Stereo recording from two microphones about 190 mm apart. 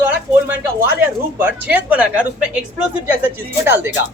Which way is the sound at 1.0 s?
10° right (ahead or behind).